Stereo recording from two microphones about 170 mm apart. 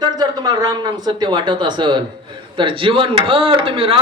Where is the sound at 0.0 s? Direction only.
25° right (ahead or behind).